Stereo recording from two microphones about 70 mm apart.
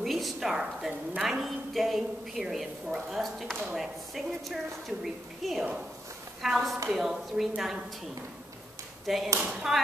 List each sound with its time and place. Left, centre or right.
0.0 s a sound: centre
1.2 s a woman's voice: centre
9.0 s speech: centre
9.4 s speech: centre